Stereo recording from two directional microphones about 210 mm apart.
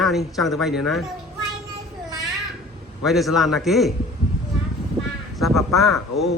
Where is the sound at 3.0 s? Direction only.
Centre (ahead or behind).